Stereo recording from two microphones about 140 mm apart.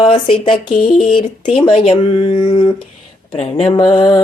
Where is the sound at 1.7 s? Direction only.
45° left (ahead or behind).